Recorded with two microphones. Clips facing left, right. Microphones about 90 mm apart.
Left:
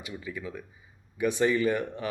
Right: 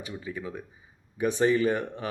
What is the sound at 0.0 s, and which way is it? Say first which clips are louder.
Speech: right 1 dB; 30° right (ahead or behind).